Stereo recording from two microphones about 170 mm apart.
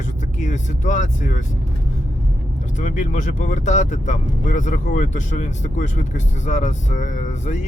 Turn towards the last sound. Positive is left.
turn(degrees=45)  # may be behind; listen again after turning